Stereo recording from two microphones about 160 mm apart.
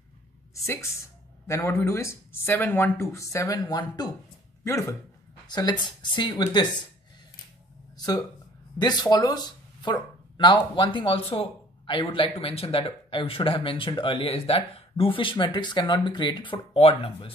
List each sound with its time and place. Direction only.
1.5 s speech: 20° left (ahead or behind)
8.7 s speech: 25° left (ahead or behind)